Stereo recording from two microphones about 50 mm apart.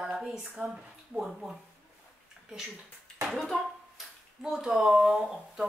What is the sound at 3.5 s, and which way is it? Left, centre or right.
Speech, left.